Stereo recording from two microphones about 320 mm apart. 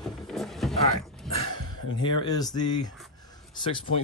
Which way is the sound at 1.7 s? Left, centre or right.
Centre.